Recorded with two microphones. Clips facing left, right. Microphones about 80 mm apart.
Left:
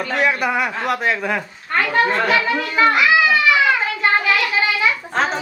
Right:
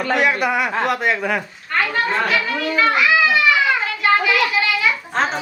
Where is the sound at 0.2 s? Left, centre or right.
Centre.